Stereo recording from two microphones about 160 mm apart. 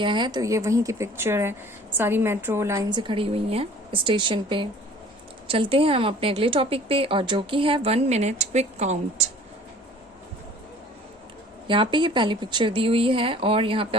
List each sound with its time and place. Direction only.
0.0 s a woman's voice: 30° right (ahead or behind)
11.7 s a woman's voice: 30° right (ahead or behind)